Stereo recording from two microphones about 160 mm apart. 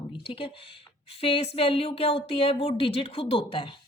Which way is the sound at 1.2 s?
35° left (ahead or behind).